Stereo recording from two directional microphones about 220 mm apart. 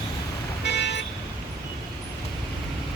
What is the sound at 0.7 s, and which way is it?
Vehicle, 50° left (ahead or behind).